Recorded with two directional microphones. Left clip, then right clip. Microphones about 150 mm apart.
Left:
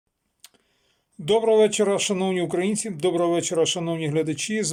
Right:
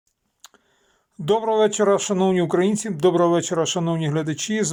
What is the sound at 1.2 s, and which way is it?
Speech, 10° left (ahead or behind).